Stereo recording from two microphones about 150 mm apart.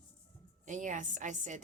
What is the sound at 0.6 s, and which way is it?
Speech, 55° right (ahead or behind).